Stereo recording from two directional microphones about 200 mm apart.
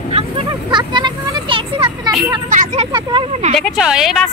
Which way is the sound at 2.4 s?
40° right (ahead or behind).